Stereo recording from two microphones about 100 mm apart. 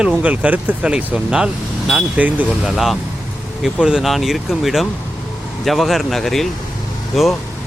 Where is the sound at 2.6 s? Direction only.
5° right (ahead or behind).